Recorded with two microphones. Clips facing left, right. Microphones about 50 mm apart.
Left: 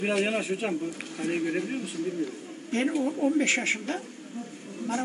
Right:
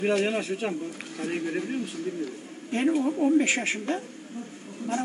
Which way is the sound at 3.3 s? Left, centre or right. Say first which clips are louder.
Right 2 dB; right.